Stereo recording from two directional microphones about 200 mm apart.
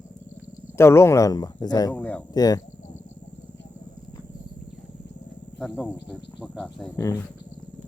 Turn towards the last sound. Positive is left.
turn(degrees=15)  # may be behind; listen again after turning